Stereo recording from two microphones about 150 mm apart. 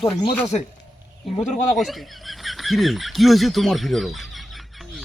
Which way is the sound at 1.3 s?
5° left (ahead or behind).